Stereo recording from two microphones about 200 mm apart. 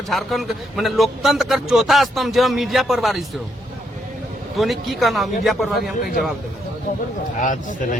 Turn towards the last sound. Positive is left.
turn(degrees=40)  # may be behind; listen again after turning